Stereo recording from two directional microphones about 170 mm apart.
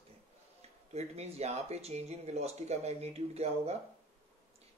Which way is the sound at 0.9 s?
40° right (ahead or behind).